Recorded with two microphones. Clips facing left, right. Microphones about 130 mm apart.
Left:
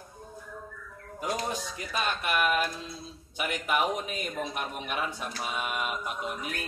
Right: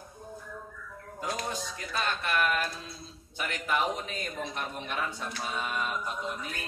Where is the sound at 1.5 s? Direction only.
15° left (ahead or behind).